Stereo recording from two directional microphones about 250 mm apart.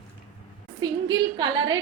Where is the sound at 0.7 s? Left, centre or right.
Centre.